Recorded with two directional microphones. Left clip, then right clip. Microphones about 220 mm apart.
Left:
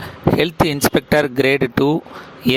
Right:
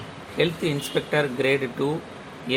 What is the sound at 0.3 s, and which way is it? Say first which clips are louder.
Speech: left 5 dB; 50° left (ahead or behind).